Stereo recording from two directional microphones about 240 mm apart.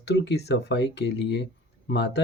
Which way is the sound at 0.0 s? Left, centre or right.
Left.